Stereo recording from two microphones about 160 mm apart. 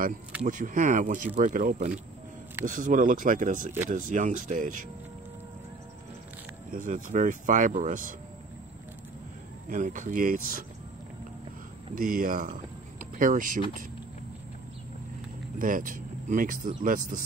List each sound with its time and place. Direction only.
0.5 s speech: 55° right (ahead or behind)
6.7 s speech: 55° right (ahead or behind)
9.7 s speech: 55° right (ahead or behind)
11.9 s speech: 60° right (ahead or behind)
15.6 s speech: 55° right (ahead or behind)